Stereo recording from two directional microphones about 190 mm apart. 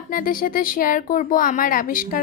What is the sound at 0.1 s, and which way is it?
Speech, 50° left (ahead or behind).